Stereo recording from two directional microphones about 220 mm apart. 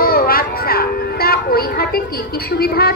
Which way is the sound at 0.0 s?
40° left (ahead or behind).